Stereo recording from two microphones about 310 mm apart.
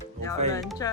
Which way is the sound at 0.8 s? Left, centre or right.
Centre.